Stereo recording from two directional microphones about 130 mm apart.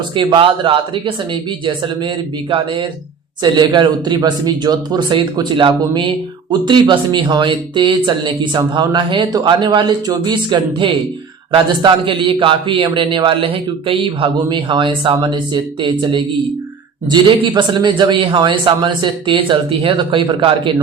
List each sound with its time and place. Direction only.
0.1 s a man's voice: 40° right (ahead or behind)